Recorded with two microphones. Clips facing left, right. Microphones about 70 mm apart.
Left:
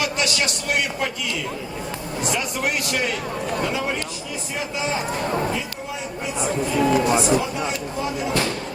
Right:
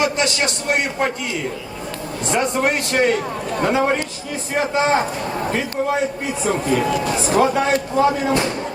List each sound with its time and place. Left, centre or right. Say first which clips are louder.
0.0 s a man's voice: right 4 dB; right
2.2 s a man's voice: right 6 dB; right
7.5 s speech: right 8 dB; right
8.3 s speech: right 4 dB; right